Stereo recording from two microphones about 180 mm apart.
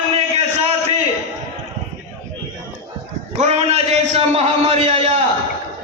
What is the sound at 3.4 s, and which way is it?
A man's voice, 35° right (ahead or behind).